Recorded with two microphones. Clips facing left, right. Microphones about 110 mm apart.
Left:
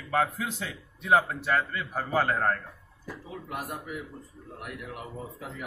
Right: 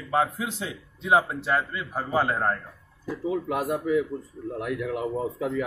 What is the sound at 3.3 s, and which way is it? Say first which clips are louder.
Speech: right 11 dB; 90° right.